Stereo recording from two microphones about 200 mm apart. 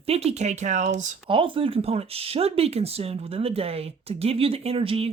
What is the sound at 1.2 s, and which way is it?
Speech, 25° right (ahead or behind).